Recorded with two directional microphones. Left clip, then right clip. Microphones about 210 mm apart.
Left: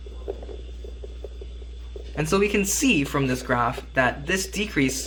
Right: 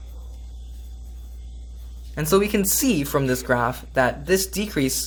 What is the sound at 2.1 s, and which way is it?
Speech, 35° right (ahead or behind).